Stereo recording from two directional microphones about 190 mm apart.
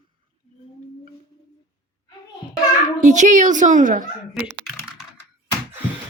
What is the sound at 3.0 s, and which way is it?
Speech, 40° right (ahead or behind).